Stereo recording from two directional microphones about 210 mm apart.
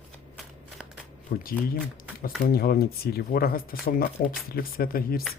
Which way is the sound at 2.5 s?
45° left (ahead or behind).